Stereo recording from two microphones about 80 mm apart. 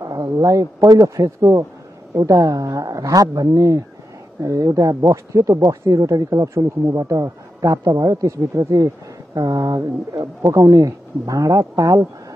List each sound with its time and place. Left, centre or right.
0.0 s speech: right